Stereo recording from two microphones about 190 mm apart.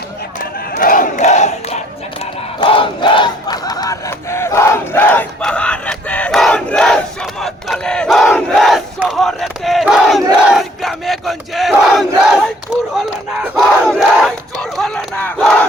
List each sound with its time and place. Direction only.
0.8 s crowd: 45° left (ahead or behind)
2.6 s battle cry: 25° left (ahead or behind); by 7.0 s 5° left (ahead or behind)
7.4 s crowd: 5° left (ahead or behind)
10.4 s battle cry: centre (ahead or behind)
13.4 s crowd: centre (ahead or behind)